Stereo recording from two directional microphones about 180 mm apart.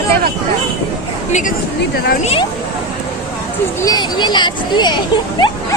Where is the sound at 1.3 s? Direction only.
45° left (ahead or behind).